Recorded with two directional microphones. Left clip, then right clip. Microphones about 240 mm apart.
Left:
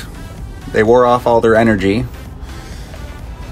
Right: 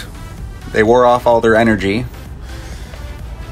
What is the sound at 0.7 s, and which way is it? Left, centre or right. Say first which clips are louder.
Speech: even; left.